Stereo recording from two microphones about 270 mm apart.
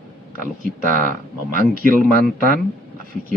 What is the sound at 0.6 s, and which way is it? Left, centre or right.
Speech, right.